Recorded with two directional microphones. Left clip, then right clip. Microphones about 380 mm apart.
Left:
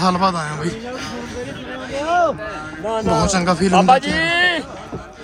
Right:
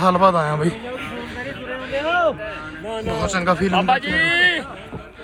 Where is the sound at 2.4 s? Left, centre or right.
Centre.